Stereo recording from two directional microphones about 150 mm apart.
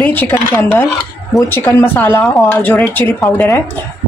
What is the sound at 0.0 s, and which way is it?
Speech, 15° left (ahead or behind).